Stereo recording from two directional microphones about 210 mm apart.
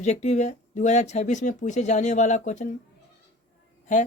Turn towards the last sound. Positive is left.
turn(degrees=35)  # may be behind; listen again after turning